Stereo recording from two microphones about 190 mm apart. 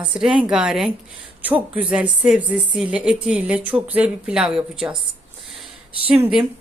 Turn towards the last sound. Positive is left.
turn(degrees=-5)  # may be behind; listen again after turning